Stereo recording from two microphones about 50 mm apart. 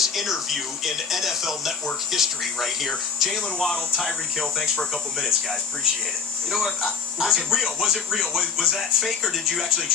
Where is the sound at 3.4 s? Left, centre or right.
Centre.